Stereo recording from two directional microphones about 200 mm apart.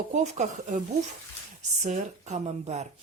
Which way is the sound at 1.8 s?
35° right (ahead or behind).